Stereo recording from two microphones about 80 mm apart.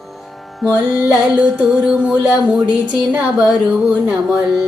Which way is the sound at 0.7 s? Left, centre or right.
Centre.